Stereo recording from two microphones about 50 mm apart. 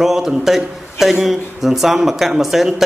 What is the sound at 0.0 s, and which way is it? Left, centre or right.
A man's voice, centre.